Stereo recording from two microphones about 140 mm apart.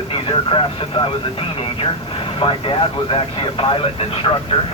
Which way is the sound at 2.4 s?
40° left (ahead or behind).